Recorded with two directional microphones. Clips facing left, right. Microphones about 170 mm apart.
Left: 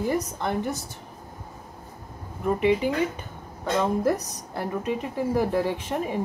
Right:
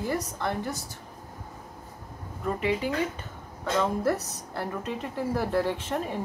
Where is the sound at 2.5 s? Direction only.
15° left (ahead or behind).